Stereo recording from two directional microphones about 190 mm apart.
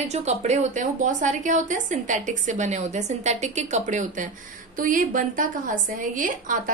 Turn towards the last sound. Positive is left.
turn(degrees=-45)  # may be behind; listen again after turning